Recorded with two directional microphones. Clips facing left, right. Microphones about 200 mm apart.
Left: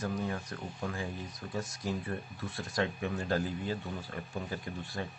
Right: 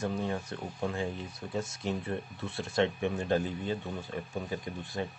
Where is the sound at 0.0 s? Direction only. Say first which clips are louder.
Right 2 dB; 30° right (ahead or behind).